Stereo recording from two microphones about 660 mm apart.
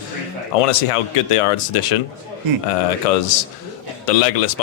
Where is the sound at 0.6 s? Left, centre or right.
Left.